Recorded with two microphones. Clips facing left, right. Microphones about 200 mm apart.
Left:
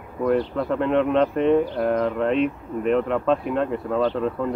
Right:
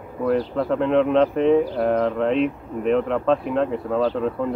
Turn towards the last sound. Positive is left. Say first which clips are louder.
# right 1 dB
turn(degrees=0)  # may be behind; listen again after turning